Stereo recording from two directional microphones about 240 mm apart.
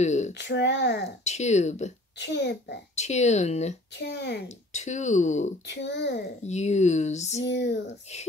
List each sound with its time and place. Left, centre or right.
0.0 s a sound: left
0.3 s speech: left
1.2 s speech: left
2.1 s speech: left
3.0 s speech: left
3.9 s speech: left
4.5 s speech: left
5.7 s speech: left
6.4 s speech: left
7.4 s speech: left